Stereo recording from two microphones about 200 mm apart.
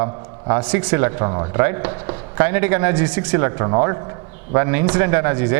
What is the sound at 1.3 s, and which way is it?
Speech, 25° right (ahead or behind).